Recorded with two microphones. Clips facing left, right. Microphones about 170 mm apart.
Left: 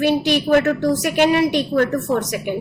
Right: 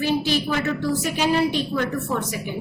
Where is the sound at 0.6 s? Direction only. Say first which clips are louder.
Left 6 dB; 50° left (ahead or behind).